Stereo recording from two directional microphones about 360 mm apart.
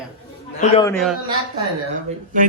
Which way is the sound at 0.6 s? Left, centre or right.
Centre.